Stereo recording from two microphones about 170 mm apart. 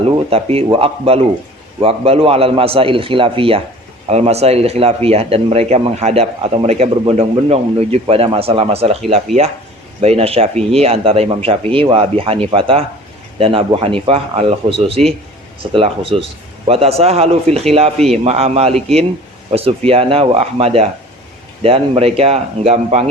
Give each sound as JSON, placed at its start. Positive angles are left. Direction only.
{"t": 0.3, "sound": "speech", "side_deg": -35}
{"t": 17.9, "sound": "a man's voice", "side_deg": 5}
{"t": 18.2, "sound": "speech", "side_deg": -40}